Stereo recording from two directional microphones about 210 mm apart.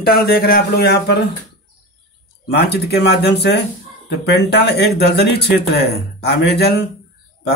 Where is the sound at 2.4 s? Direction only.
50° left (ahead or behind).